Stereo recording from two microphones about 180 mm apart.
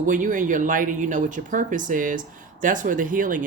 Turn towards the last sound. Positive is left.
turn(degrees=-45)  # may be behind; listen again after turning